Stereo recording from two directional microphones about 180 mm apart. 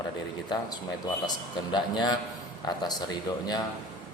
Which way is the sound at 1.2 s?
25° left (ahead or behind).